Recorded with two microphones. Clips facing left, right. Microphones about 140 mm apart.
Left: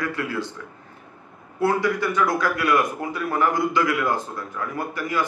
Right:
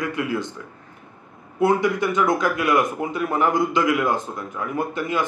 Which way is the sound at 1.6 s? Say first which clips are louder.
Right 2 dB; 20° right (ahead or behind).